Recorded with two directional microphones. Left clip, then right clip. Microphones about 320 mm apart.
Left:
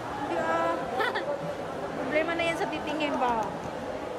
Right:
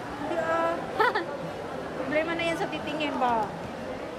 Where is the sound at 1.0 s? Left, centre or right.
Centre.